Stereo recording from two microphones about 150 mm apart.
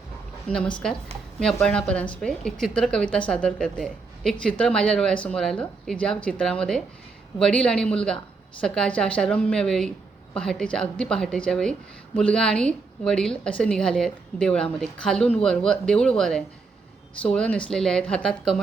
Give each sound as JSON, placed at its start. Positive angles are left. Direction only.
{"t": 0.4, "sound": "a woman's voice", "side_deg": 5}